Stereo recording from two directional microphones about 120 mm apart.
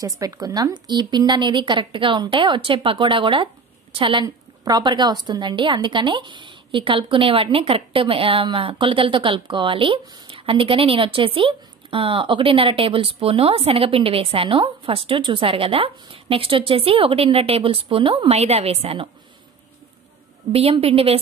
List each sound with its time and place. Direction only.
0.0 s a woman's voice: 30° right (ahead or behind); by 19.0 s 55° right (ahead or behind)
20.5 s a woman's voice: 55° right (ahead or behind)